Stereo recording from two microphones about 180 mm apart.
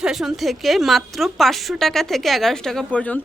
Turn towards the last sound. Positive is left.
turn(degrees=5)  # may be behind; listen again after turning